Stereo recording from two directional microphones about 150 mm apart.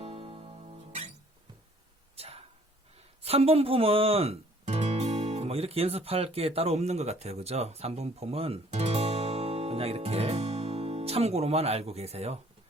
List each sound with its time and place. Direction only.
0.0 s music: 45° right (ahead or behind)
2.1 s a sound: 40° right (ahead or behind)
3.2 s speech: 40° right (ahead or behind)